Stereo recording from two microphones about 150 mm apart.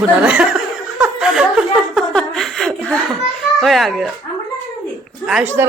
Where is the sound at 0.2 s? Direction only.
5° right (ahead or behind).